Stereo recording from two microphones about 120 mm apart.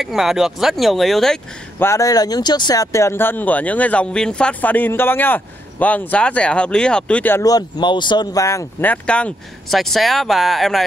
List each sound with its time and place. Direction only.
0.0 s speech: 5° right (ahead or behind)
1.8 s speech: 25° left (ahead or behind)
7.4 s speech: 35° left (ahead or behind)
8.8 s speech: 10° left (ahead or behind)